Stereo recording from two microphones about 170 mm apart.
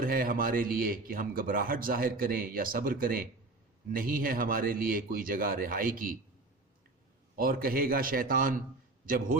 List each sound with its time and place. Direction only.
0.0 s a man's voice: 55° right (ahead or behind)
7.3 s a man's voice: 55° right (ahead or behind)